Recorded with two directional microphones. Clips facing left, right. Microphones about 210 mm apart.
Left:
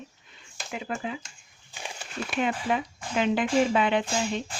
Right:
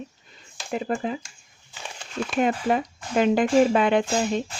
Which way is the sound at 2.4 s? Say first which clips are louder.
Right 5 dB; 45° right (ahead or behind).